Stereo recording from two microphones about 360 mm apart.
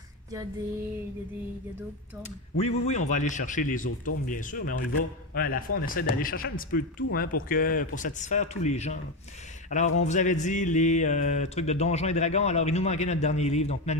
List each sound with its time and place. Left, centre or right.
2.5 s mantra: centre